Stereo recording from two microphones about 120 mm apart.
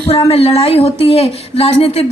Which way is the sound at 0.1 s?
55° left (ahead or behind).